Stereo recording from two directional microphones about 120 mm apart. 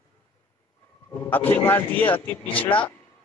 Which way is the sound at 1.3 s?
15° left (ahead or behind).